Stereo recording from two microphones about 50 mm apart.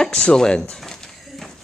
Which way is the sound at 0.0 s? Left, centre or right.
Centre.